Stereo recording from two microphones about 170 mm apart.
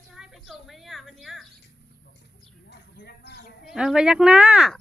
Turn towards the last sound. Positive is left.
turn(degrees=-5)  # may be behind; listen again after turning